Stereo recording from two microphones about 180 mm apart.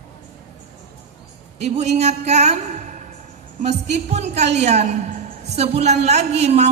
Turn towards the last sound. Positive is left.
turn(degrees=-35)  # may be behind; listen again after turning